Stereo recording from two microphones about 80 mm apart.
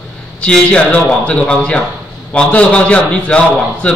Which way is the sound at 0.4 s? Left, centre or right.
Centre.